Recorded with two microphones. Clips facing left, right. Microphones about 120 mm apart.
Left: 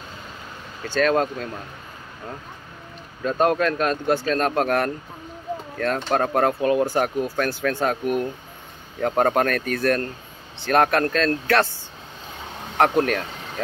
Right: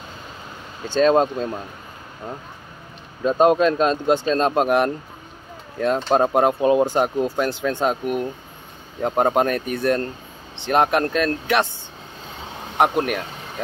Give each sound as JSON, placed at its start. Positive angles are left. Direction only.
{"t": 0.8, "sound": "speech", "side_deg": -20}
{"t": 3.3, "sound": "speech", "side_deg": -20}
{"t": 12.7, "sound": "speech", "side_deg": -15}